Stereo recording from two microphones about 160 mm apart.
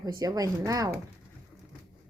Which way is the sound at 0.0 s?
25° right (ahead or behind).